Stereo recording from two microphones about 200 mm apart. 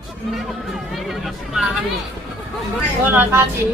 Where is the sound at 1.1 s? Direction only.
Centre (ahead or behind).